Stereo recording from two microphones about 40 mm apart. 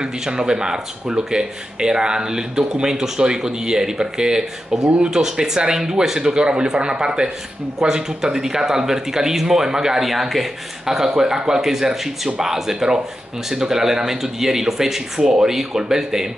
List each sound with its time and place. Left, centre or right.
0.0 s speech: centre